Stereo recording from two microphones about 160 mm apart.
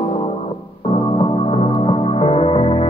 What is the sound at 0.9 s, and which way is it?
Music, 35° left (ahead or behind).